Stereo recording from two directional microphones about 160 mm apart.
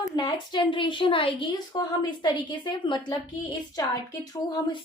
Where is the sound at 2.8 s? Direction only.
30° left (ahead or behind).